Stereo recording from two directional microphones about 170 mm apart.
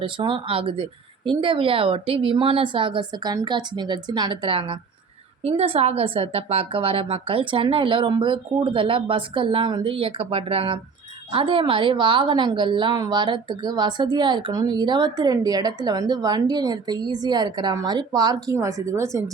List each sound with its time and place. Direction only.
0.0 s a woman's voice: 25° right (ahead or behind)